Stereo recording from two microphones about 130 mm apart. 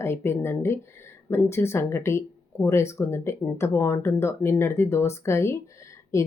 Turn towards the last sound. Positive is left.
turn(degrees=25)  # may be behind; listen again after turning